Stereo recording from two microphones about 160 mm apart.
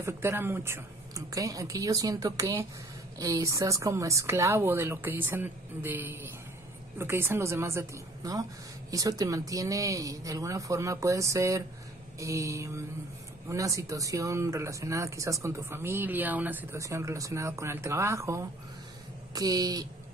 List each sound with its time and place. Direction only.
0.0 s a woman's voice: 15° right (ahead or behind)